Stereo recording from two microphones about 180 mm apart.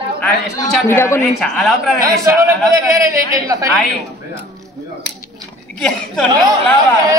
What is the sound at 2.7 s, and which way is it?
Speech, 20° right (ahead or behind).